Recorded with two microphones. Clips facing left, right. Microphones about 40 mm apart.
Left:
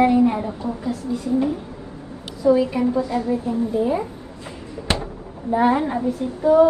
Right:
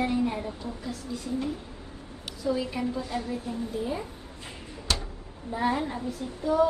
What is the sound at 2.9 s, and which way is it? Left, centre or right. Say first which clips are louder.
Speech: left 10 dB; left.